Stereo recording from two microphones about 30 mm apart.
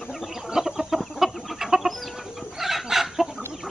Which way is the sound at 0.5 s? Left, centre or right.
Centre.